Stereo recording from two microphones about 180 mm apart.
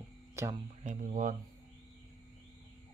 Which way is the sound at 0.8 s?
45° right (ahead or behind).